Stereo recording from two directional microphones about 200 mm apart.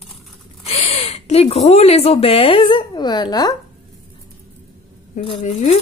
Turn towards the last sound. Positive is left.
turn(degrees=35)  # may be behind; listen again after turning